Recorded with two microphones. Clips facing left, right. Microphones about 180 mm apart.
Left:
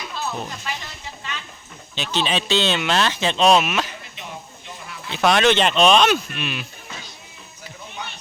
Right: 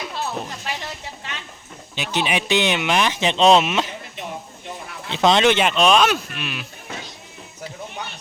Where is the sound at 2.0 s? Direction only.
15° right (ahead or behind).